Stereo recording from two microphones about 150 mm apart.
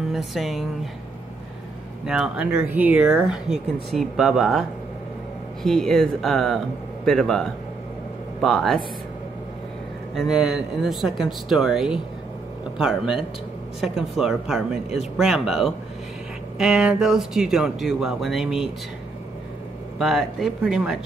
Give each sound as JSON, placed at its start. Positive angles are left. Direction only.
{"t": 0.3, "sound": "speech", "side_deg": 0}
{"t": 2.0, "sound": "speech", "side_deg": -5}
{"t": 10.1, "sound": "speech", "side_deg": -5}
{"t": 20.0, "sound": "speech", "side_deg": 0}